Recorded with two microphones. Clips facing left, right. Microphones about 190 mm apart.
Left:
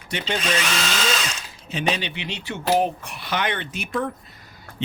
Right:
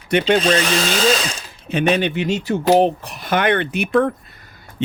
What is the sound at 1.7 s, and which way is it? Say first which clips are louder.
Speech: right 8 dB; 55° right (ahead or behind).